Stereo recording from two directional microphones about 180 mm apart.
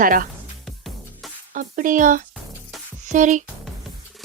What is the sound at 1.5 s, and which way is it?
A woman's voice, 50° right (ahead or behind).